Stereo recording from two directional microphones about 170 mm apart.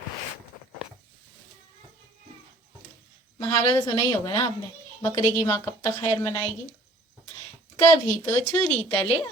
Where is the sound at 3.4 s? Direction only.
20° left (ahead or behind).